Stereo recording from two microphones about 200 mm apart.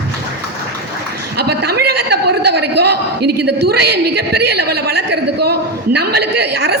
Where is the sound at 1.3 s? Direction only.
55° right (ahead or behind).